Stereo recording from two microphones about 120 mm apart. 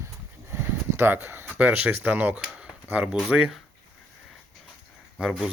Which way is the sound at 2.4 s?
5° right (ahead or behind).